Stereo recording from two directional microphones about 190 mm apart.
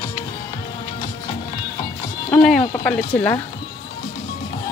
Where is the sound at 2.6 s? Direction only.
15° left (ahead or behind).